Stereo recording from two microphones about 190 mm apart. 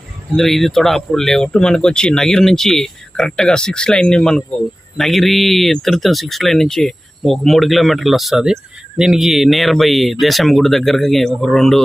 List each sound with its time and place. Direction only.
0.3 s speech: centre (ahead or behind)